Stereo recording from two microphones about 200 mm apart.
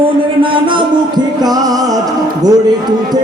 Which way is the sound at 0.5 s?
25° right (ahead or behind).